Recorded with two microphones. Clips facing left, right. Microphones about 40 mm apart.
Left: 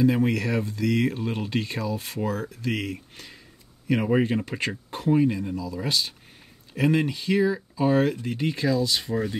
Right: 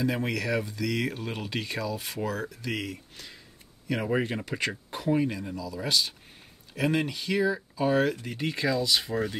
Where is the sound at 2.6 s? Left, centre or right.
Centre.